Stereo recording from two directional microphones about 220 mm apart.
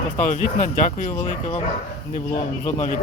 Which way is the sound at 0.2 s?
35° left (ahead or behind).